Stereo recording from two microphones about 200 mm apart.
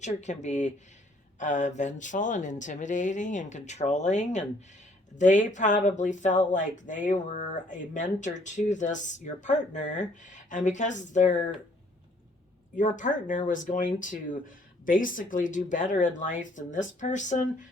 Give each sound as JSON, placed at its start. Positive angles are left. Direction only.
{"t": 0.0, "sound": "speech", "side_deg": 35}
{"t": 12.7, "sound": "speech", "side_deg": 40}